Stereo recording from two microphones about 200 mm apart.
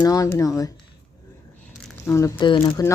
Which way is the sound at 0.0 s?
15° left (ahead or behind).